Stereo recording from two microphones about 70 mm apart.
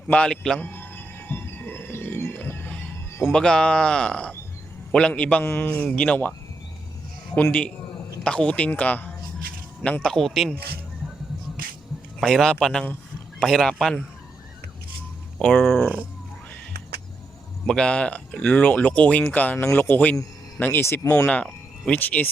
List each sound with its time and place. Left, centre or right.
0.1 s speech: centre
0.6 s a sound: left
2.5 s music: left
3.3 s speech: centre
8.2 s speech: centre
10.0 s speech: centre
12.2 s speech: centre
15.4 s speech: centre
17.7 s speech: centre; by 20.8 s left
20.8 s speech: left
21.2 s speech: centre